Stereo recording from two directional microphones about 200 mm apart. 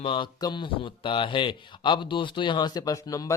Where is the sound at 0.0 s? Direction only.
25° left (ahead or behind).